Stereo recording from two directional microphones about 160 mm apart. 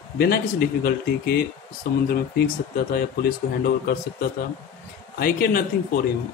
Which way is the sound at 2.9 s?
75° left (ahead or behind).